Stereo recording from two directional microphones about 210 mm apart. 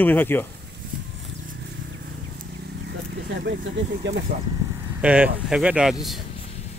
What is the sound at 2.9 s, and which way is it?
Speech, 55° right (ahead or behind).